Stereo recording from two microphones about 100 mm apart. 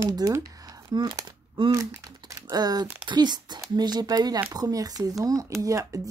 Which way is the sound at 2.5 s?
45° right (ahead or behind).